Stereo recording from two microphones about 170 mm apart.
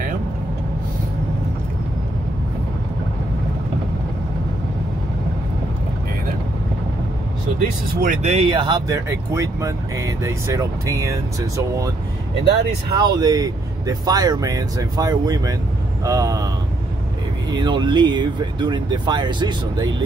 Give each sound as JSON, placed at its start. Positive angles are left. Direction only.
{"t": 8.0, "sound": "speech", "side_deg": -45}
{"t": 12.9, "sound": "speech", "side_deg": -25}
{"t": 17.5, "sound": "speech", "side_deg": -25}